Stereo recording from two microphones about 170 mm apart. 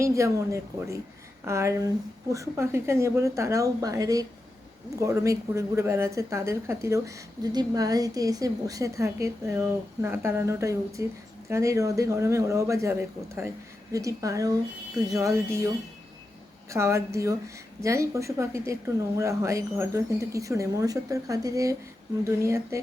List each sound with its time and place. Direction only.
0.0 s a woman's voice: 15° right (ahead or behind)
16.7 s speech: 15° right (ahead or behind)